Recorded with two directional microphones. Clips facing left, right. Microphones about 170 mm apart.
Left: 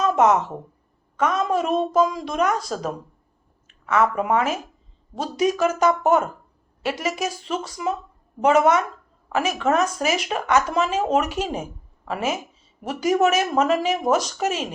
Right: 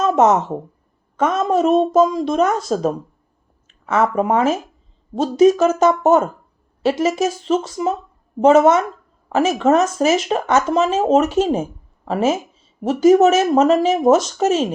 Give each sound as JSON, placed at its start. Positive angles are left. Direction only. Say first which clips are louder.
{"t": 0.0, "sound": "a woman's voice", "louder": "right 4 dB", "side_deg": -25}